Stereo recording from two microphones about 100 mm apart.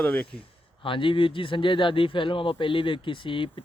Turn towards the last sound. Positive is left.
turn(degrees=60)  # may be behind; listen again after turning